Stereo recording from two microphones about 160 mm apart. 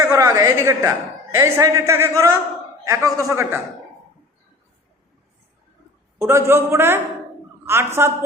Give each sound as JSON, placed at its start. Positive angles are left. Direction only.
{"t": 0.0, "sound": "a woman's voice", "side_deg": -20}
{"t": 6.1, "sound": "a man's voice", "side_deg": -15}